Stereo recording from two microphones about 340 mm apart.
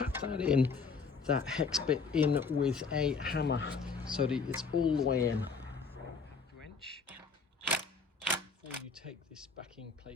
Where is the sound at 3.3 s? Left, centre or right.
Left.